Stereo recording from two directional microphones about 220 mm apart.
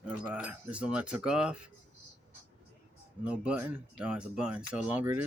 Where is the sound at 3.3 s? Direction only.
5° right (ahead or behind).